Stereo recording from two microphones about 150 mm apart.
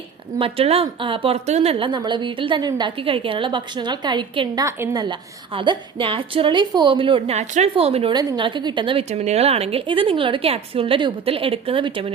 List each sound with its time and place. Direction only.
0.3 s a woman's voice: 40° right (ahead or behind)
5.5 s a woman's voice: 35° right (ahead or behind)
8.1 s a woman's voice: 25° right (ahead or behind)
9.0 s a woman's voice: 45° right (ahead or behind)